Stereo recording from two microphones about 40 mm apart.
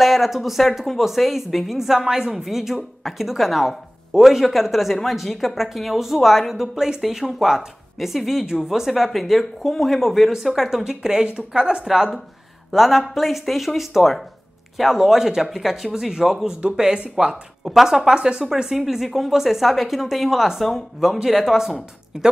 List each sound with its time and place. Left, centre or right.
0.0 s a woman's voice: centre
10.8 s speech: centre
11.8 s a woman's voice: centre